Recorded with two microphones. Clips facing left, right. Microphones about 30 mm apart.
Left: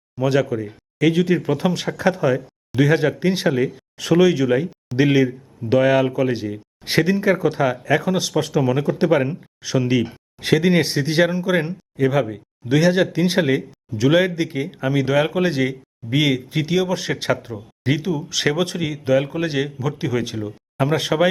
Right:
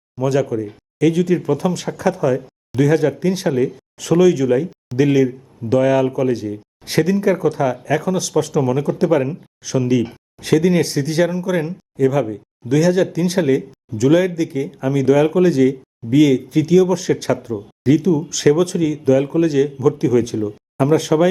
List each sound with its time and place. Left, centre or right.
0.2 s a man's voice: left